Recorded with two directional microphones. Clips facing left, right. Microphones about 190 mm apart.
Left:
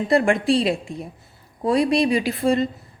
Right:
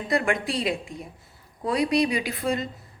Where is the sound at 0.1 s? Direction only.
30° left (ahead or behind).